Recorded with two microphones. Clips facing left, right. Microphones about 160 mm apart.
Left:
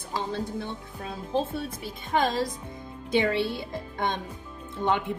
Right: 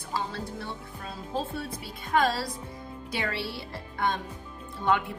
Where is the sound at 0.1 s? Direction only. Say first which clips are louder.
Left 3 dB; 20° left (ahead or behind).